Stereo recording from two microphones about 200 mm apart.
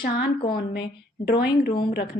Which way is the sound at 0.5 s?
55° left (ahead or behind).